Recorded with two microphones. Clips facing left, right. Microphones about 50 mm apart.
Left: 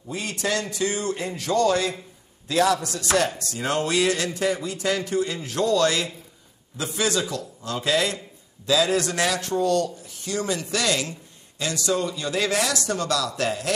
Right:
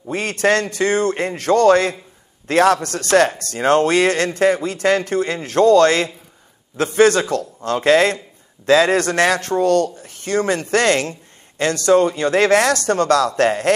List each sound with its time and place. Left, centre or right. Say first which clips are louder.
0.1 s a man's voice: right 9 dB; right